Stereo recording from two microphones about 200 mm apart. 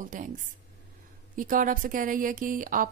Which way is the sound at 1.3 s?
40° right (ahead or behind).